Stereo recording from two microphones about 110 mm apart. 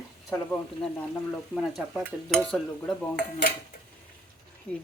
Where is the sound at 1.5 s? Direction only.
Centre (ahead or behind).